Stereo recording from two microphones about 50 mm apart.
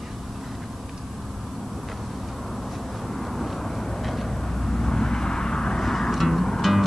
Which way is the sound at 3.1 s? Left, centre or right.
Centre.